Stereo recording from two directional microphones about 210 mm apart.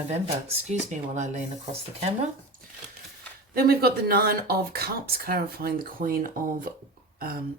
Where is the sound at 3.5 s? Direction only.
45° right (ahead or behind).